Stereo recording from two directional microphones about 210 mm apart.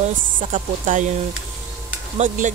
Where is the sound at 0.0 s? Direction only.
40° right (ahead or behind).